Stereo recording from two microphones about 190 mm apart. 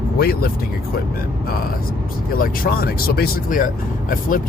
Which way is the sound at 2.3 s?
50° left (ahead or behind).